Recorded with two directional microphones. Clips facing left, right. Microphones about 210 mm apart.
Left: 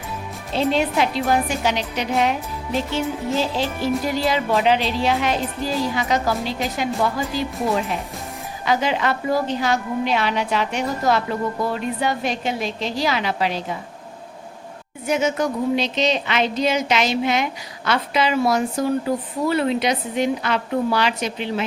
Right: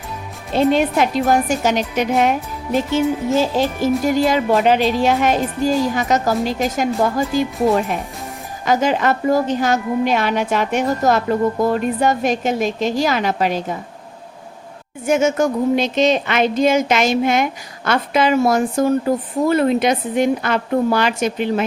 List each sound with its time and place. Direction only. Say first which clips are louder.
0.5 s speech: right 5 dB; 50° right (ahead or behind)
15.0 s speech: right 5 dB; 50° right (ahead or behind)